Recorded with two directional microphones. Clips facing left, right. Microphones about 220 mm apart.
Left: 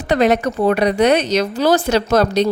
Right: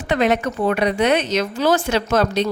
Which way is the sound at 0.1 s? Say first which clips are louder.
Left 3 dB; 40° left (ahead or behind).